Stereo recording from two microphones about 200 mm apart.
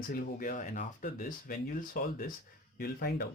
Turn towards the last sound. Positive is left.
turn(degrees=50)  # may be behind; listen again after turning